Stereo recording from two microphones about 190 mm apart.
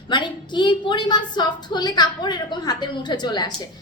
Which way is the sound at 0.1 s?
25° left (ahead or behind).